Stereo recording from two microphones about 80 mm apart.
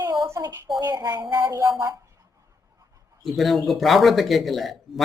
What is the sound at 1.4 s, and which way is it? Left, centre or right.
Speech, right.